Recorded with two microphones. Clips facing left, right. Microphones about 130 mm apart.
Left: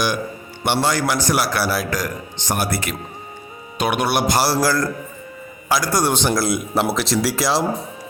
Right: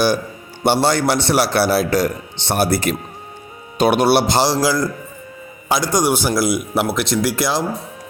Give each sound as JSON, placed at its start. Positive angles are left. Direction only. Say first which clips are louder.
{"t": 0.6, "sound": "a man's voice", "louder": "right 4 dB", "side_deg": -35}
{"t": 4.6, "sound": "a man's voice", "louder": "right 1 dB", "side_deg": -15}
{"t": 6.2, "sound": "speech", "louder": "right 2 dB", "side_deg": -5}